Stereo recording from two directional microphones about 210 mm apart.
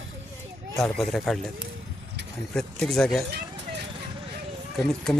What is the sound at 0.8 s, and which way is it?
Speech, centre (ahead or behind).